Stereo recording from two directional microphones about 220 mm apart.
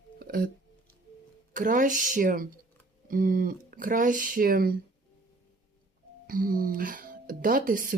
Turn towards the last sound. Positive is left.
turn(degrees=-40)  # may be behind; listen again after turning